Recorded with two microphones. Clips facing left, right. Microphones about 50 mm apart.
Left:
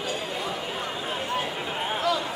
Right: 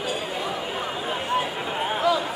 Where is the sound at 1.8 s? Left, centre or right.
Centre.